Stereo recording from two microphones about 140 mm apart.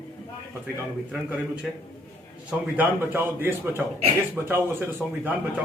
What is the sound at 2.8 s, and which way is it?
A man's voice, 15° right (ahead or behind).